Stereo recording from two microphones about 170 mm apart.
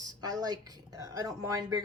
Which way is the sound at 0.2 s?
20° right (ahead or behind).